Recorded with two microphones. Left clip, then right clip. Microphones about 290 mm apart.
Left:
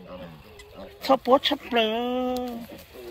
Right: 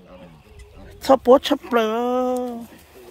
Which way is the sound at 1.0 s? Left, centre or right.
Right.